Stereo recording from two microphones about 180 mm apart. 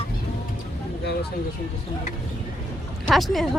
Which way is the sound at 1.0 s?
65° left (ahead or behind).